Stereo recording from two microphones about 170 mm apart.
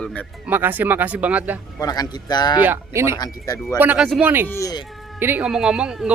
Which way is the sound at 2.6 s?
15° right (ahead or behind).